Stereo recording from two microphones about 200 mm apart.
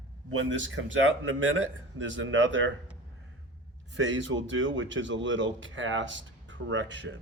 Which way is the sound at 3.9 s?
70° right (ahead or behind).